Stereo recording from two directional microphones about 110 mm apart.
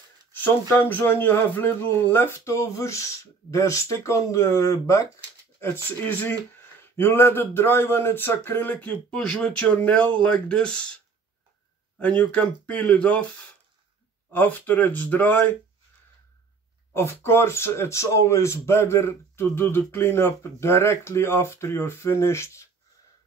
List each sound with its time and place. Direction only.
0.3 s speech: 15° left (ahead or behind)
5.6 s speech: 20° left (ahead or behind)
12.0 s speech: 10° left (ahead or behind)
14.3 s speech: 15° left (ahead or behind)
16.9 s speech: 20° left (ahead or behind)